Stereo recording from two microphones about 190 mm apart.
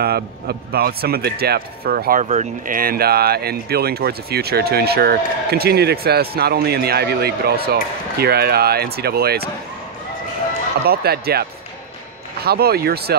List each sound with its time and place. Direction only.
0.0 s a man's voice: 55° right (ahead or behind)
10.9 s a man's voice: 55° right (ahead or behind)